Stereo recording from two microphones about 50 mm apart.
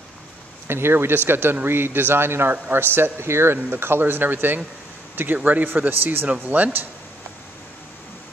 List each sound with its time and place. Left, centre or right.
0.7 s speech: right